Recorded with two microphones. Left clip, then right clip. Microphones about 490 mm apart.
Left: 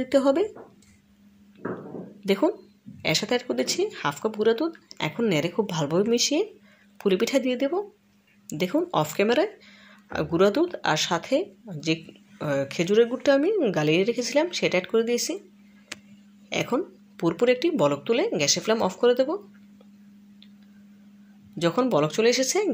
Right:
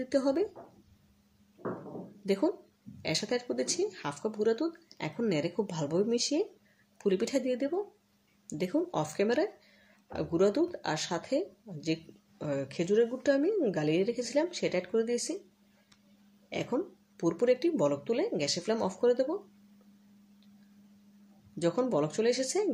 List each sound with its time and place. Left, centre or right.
0.0 s speech: left
2.2 s speech: left
16.4 s speech: left
21.5 s speech: left